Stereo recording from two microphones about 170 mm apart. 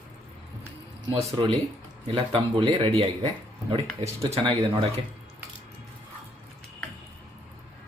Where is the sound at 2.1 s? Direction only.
35° right (ahead or behind).